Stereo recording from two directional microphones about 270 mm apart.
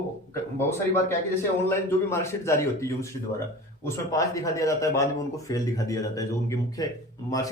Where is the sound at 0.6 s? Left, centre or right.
Centre.